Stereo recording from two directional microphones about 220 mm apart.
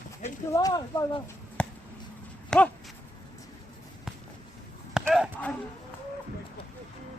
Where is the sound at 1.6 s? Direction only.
5° left (ahead or behind).